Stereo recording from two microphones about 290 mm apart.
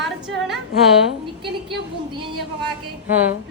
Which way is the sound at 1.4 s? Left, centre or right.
Centre.